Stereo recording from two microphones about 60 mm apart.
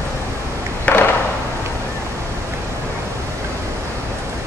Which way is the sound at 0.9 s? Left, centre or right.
Left.